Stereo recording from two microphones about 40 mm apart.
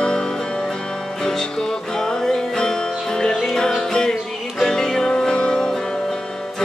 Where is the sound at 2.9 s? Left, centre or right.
Centre.